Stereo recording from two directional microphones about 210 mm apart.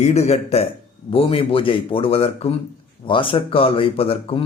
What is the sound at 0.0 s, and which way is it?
A man's voice, 30° left (ahead or behind).